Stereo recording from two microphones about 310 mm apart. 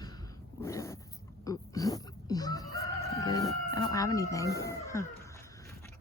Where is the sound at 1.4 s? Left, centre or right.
Centre.